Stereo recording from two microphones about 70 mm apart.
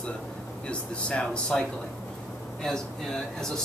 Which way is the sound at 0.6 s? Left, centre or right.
Centre.